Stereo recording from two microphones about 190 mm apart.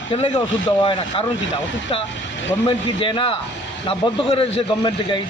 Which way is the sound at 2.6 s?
25° left (ahead or behind).